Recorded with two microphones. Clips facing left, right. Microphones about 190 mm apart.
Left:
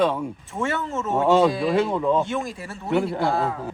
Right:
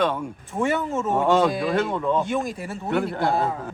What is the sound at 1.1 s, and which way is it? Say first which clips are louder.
Speech: left 2 dB; centre (ahead or behind).